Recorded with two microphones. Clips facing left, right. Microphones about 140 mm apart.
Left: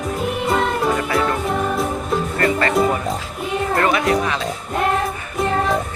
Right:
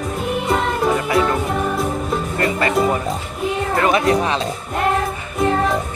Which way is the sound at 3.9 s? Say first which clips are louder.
Right 5 dB; 25° right (ahead or behind).